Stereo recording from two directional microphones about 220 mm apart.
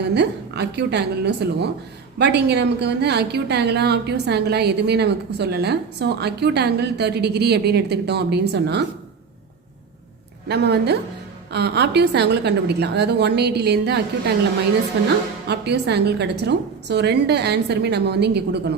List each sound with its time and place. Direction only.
0.1 s a woman's voice: 50° right (ahead or behind)
10.5 s a woman's voice: 50° right (ahead or behind)
15.4 s a woman's voice: 50° right (ahead or behind)